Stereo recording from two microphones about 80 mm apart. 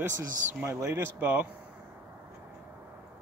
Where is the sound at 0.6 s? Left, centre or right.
Right.